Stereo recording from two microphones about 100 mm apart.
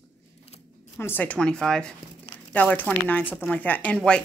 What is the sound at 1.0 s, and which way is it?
A woman's voice, 15° left (ahead or behind).